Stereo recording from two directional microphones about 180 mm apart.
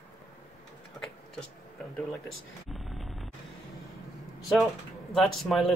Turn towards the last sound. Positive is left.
turn(degrees=0)  # may be behind; listen again after turning